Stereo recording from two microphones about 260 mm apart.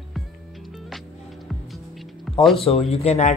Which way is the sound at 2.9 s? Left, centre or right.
Left.